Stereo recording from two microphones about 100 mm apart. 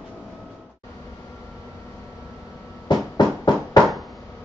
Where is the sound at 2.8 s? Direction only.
45° left (ahead or behind).